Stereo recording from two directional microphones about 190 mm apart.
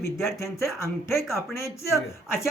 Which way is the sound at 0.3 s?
15° left (ahead or behind).